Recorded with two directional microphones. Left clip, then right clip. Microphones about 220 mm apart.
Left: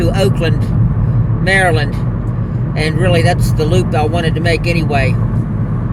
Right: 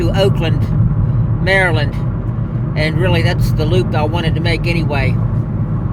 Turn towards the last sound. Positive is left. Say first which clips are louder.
# left 3 dB
turn(degrees=25)  # may be behind; listen again after turning